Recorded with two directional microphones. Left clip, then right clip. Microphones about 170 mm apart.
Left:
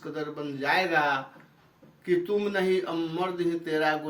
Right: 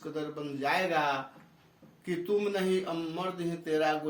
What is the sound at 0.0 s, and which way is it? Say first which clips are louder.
Speech: left 3 dB; 30° right (ahead or behind).